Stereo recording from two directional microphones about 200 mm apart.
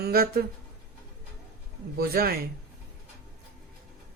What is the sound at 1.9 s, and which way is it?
Speech, 50° right (ahead or behind).